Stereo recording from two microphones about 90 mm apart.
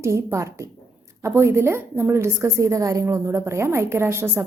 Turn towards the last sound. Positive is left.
turn(degrees=-30)  # may be behind; listen again after turning